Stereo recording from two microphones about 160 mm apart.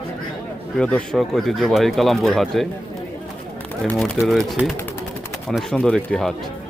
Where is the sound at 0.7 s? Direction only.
5° left (ahead or behind).